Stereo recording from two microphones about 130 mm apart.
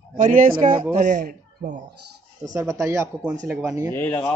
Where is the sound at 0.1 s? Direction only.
90° right.